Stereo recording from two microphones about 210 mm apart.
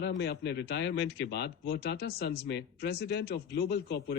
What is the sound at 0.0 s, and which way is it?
Speech, 55° left (ahead or behind).